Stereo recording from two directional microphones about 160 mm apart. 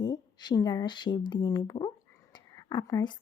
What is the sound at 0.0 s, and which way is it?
A woman's voice, 25° left (ahead or behind).